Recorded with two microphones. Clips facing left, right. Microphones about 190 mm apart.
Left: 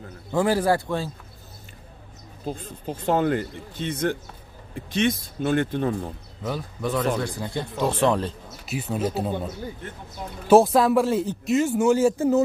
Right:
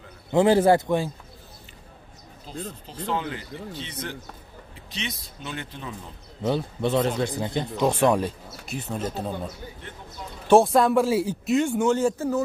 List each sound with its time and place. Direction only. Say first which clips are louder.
0.3 s a man's voice: right 4 dB; 20° right (ahead or behind)
2.9 s speech: left 8 dB; 50° left (ahead or behind)
6.4 s a man's voice: right 4 dB; 25° right (ahead or behind)
8.6 s speech: left 4 dB; 5° left (ahead or behind)
10.5 s a man's voice: left 1 dB; centre (ahead or behind)